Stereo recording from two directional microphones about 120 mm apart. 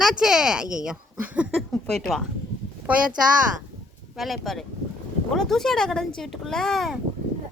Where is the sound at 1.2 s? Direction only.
10° right (ahead or behind).